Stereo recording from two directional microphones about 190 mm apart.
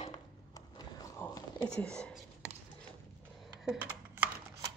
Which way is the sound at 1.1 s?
20° left (ahead or behind).